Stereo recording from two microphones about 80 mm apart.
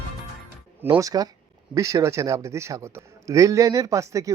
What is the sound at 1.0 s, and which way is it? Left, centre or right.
A man's voice, right.